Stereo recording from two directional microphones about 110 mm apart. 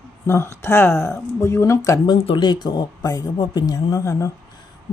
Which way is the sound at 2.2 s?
50° left (ahead or behind).